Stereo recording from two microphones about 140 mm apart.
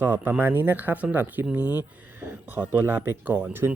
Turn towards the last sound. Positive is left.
turn(degrees=-15)  # may be behind; listen again after turning